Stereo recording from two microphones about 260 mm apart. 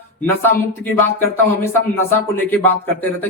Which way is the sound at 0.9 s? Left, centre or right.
Centre.